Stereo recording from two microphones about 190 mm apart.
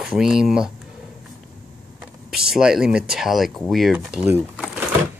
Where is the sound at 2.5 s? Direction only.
5° right (ahead or behind).